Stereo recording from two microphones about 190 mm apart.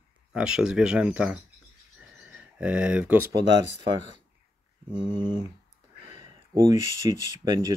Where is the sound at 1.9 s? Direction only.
5° right (ahead or behind).